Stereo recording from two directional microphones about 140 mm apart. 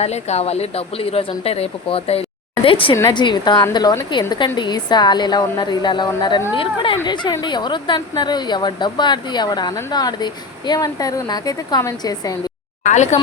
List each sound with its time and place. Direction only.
0.0 s speech: 50° left (ahead or behind); by 12.4 s 25° left (ahead or behind)
12.8 s a woman's voice: 60° left (ahead or behind)